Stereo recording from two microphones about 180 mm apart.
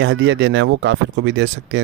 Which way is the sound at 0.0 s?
90° right.